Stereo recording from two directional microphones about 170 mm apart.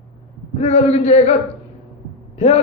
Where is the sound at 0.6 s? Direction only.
40° left (ahead or behind).